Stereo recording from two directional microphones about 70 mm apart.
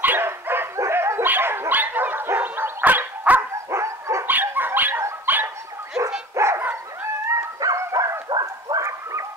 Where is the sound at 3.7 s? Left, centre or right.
Right.